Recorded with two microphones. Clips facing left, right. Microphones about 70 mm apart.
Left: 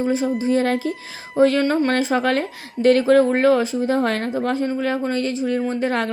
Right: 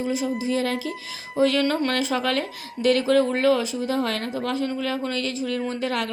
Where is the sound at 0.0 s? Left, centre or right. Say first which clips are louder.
Left 5 dB; left.